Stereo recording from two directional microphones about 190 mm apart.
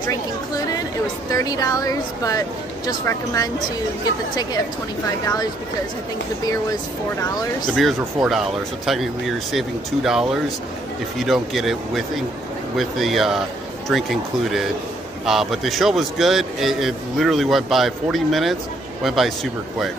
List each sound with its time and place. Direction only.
1.3 s a woman's voice: 20° left (ahead or behind)
5.2 s a woman's voice: 20° left (ahead or behind)
7.7 s a man's voice: centre (ahead or behind)